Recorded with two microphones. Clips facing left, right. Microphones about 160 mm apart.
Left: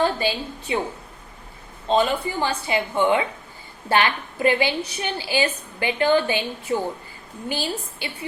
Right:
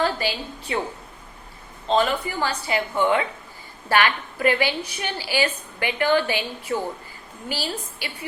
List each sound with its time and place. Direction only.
0.0 s a woman's voice: 20° left (ahead or behind)
1.9 s a woman's voice: 20° left (ahead or behind)